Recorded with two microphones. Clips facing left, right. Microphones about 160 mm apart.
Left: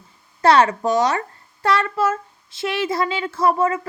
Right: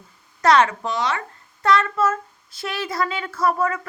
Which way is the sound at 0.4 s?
35° left (ahead or behind).